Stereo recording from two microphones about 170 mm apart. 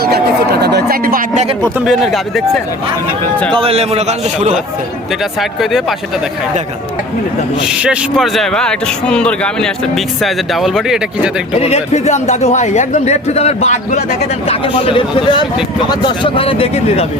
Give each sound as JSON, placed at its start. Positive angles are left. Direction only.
{"t": 0.0, "sound": "speech", "side_deg": -65}
{"t": 1.8, "sound": "speech", "side_deg": 0}
{"t": 3.5, "sound": "a man's voice", "side_deg": -35}
{"t": 5.4, "sound": "speech", "side_deg": 0}
{"t": 7.6, "sound": "speech", "side_deg": -5}
{"t": 11.5, "sound": "speech", "side_deg": 40}